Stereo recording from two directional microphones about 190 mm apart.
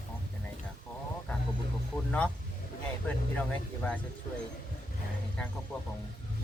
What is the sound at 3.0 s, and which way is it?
Speech, 5° left (ahead or behind).